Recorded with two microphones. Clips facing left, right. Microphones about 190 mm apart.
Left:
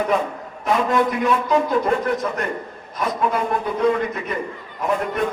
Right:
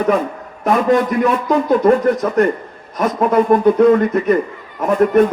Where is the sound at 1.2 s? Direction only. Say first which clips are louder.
Right 3 dB; 55° right (ahead or behind).